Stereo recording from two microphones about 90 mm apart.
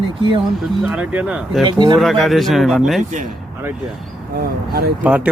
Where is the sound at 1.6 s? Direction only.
60° right (ahead or behind).